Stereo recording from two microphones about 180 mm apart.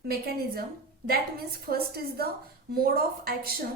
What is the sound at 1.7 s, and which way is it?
A woman's voice, 55° right (ahead or behind).